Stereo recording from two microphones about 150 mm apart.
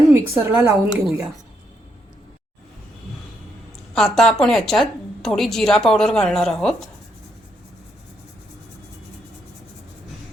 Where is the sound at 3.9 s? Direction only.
Centre (ahead or behind).